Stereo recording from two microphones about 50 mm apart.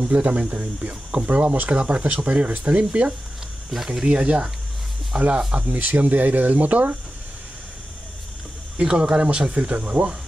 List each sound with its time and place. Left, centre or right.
0.1 s speech: right
3.7 s speech: centre
4.1 s speech: centre
5.7 s speech: right
8.7 s speech: centre